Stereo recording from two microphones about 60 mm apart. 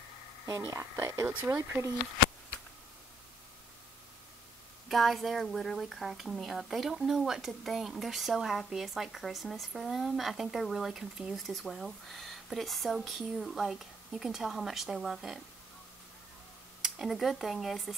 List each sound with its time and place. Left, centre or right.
0.7 s speech: right
4.8 s speech: centre
11.4 s speech: centre
16.8 s speech: centre